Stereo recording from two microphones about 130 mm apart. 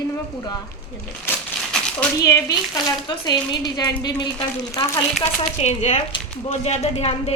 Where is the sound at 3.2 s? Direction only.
35° left (ahead or behind).